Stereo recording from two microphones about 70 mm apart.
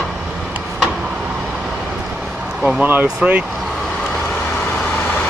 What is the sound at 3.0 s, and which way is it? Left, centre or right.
Speech, centre.